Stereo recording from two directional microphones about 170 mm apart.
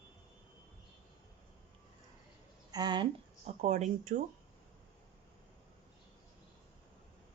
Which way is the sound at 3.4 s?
40° right (ahead or behind).